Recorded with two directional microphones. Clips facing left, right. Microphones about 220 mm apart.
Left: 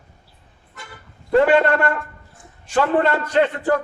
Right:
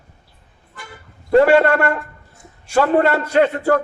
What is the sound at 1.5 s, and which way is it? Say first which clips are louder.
Speech: right 3 dB; 45° right (ahead or behind).